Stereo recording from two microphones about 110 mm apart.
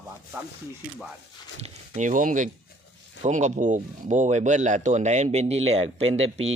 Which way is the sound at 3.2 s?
90° right.